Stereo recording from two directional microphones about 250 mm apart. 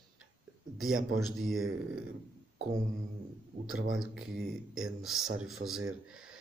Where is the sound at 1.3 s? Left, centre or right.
Centre.